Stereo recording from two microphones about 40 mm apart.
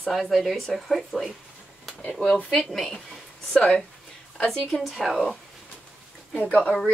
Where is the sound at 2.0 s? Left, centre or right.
Left.